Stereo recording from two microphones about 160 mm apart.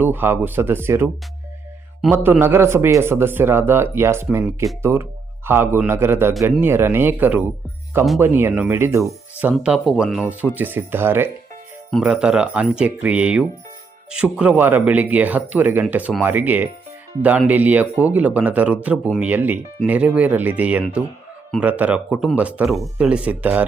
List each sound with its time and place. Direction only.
0.0 s speech: 15° right (ahead or behind)
11.9 s speech: centre (ahead or behind)